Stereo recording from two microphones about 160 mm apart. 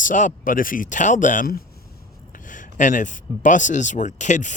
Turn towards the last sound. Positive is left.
turn(degrees=50)  # may be behind; listen again after turning